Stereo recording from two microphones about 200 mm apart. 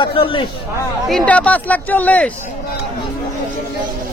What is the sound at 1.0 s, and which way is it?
Speech, 5° left (ahead or behind).